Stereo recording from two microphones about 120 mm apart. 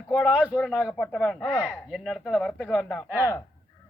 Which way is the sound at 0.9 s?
10° left (ahead or behind).